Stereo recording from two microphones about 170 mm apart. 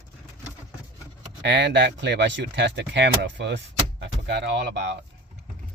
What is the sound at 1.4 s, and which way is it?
Speech, 90° right.